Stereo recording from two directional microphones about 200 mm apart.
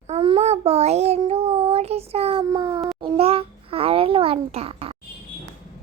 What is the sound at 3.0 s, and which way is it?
A child's voice, 30° right (ahead or behind).